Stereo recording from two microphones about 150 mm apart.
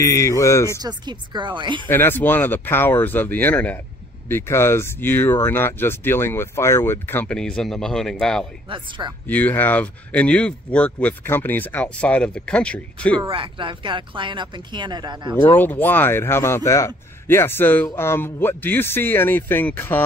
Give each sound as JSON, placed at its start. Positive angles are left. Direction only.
{"t": 0.0, "sound": "speech", "side_deg": 20}
{"t": 0.7, "sound": "speech", "side_deg": -30}
{"t": 1.9, "sound": "speech", "side_deg": 15}
{"t": 8.6, "sound": "speech", "side_deg": -35}
{"t": 9.3, "sound": "speech", "side_deg": 10}
{"t": 13.3, "sound": "speech", "side_deg": -35}
{"t": 15.4, "sound": "speech", "side_deg": 10}